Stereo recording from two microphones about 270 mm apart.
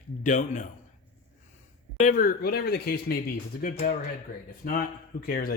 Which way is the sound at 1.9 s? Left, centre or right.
Left.